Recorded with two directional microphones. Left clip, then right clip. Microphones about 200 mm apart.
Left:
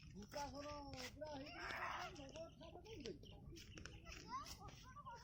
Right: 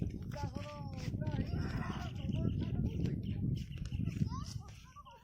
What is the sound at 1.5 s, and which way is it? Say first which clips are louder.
Chicken: right 3 dB; 15° left (ahead or behind).